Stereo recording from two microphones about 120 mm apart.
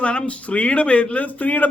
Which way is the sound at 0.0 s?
10° left (ahead or behind).